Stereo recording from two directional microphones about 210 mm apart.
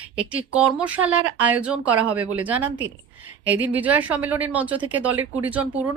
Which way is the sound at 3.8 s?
5° right (ahead or behind).